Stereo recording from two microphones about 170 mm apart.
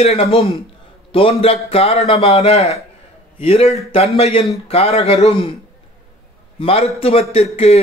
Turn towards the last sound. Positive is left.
turn(degrees=40)  # may be behind; listen again after turning